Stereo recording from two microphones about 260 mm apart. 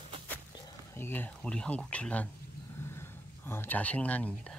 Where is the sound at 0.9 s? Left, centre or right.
Centre.